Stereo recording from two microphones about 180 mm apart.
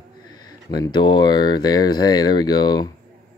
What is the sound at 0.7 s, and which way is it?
Speech, 20° left (ahead or behind).